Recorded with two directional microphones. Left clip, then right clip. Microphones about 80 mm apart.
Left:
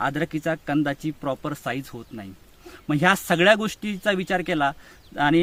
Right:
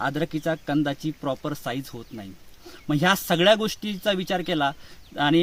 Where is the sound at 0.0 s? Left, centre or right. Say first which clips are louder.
Left 1 dB; centre.